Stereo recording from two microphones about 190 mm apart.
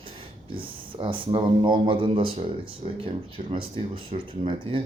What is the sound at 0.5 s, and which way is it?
Speech, 25° right (ahead or behind).